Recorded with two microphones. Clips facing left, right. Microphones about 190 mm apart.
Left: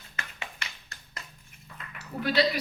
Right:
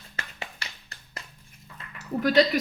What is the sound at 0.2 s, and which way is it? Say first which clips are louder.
Music: right 1 dB; 30° right (ahead or behind).